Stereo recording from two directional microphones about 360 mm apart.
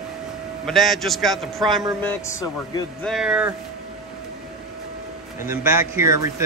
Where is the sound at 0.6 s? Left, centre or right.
Centre.